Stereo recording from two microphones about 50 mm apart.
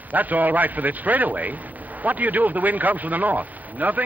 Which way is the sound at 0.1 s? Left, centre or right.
Right.